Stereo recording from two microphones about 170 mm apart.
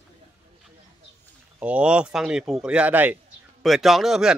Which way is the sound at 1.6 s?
5° right (ahead or behind).